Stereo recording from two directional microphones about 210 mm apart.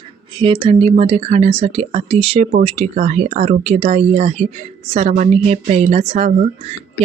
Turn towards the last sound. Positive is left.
turn(degrees=-30)  # may be behind; listen again after turning